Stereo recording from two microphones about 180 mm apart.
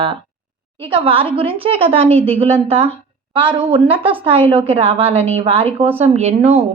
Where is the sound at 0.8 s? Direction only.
30° right (ahead or behind).